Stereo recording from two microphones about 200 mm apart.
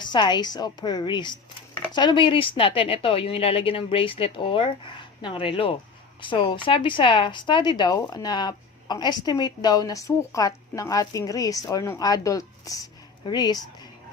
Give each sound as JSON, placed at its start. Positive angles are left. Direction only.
{"t": 0.0, "sound": "speech", "side_deg": 20}